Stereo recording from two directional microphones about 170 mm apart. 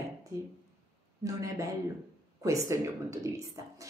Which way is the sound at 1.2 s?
20° right (ahead or behind).